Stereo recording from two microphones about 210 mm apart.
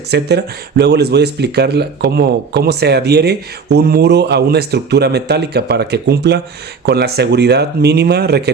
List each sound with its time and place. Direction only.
0.1 s speech: 50° right (ahead or behind)